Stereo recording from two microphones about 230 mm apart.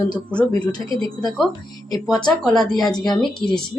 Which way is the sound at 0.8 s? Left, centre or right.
Right.